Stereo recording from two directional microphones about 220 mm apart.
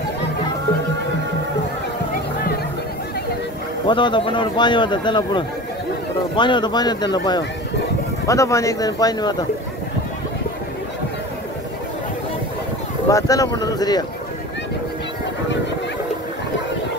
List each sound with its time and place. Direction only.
3.8 s a man's voice: 20° left (ahead or behind)
13.1 s speech: 15° left (ahead or behind)